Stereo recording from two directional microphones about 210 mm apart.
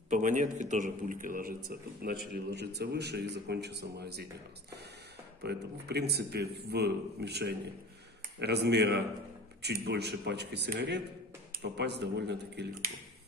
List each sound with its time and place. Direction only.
0.1 s a man's voice: 35° right (ahead or behind)
5.4 s a man's voice: 50° right (ahead or behind)